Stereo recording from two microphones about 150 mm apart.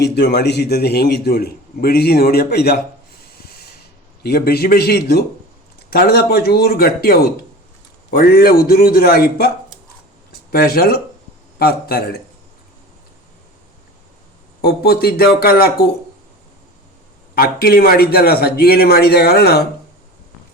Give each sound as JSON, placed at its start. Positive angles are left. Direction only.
{"t": 0.0, "sound": "a man's voice", "side_deg": 90}
{"t": 10.5, "sound": "a man's voice", "side_deg": 90}
{"t": 14.6, "sound": "a man's voice", "side_deg": 90}
{"t": 17.3, "sound": "a man's voice", "side_deg": 85}